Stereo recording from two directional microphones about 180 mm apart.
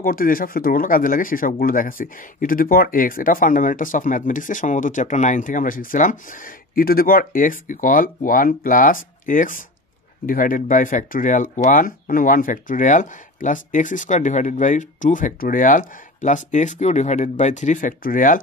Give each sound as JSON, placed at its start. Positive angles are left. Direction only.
{"t": 0.0, "sound": "speech", "side_deg": 50}